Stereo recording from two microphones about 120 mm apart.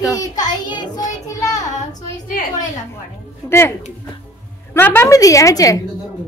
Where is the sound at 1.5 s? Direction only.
90° left.